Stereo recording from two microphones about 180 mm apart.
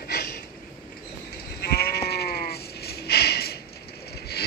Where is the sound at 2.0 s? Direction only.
60° left (ahead or behind).